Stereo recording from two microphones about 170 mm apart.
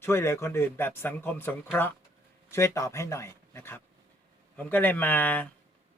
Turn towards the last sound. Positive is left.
turn(degrees=10)  # may be behind; listen again after turning